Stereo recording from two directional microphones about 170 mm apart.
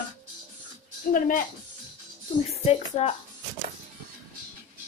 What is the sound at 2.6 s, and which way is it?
Speech, 35° left (ahead or behind).